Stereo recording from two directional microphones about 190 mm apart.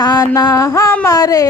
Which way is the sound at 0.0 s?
20° left (ahead or behind).